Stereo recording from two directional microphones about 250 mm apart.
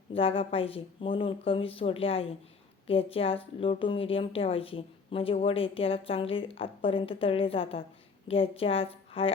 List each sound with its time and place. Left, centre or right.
0.1 s speech: left